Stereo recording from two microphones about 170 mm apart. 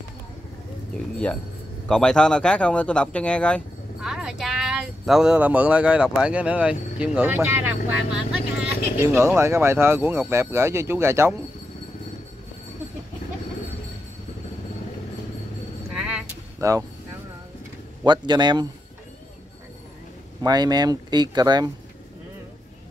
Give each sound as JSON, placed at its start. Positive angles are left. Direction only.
{"t": 1.1, "sound": "speech", "side_deg": 5}
{"t": 15.9, "sound": "vehicle", "side_deg": -5}
{"t": 18.0, "sound": "speech", "side_deg": -25}
{"t": 20.4, "sound": "speech", "side_deg": -25}